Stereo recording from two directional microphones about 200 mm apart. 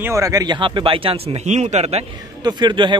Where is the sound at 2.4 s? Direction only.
20° right (ahead or behind).